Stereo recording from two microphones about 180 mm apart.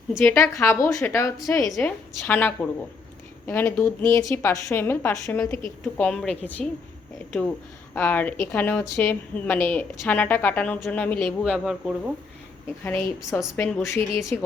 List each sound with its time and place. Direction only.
0.2 s a woman's voice: 15° left (ahead or behind)
7.9 s a woman's voice: 10° left (ahead or behind)
12.8 s a woman's voice: 10° left (ahead or behind)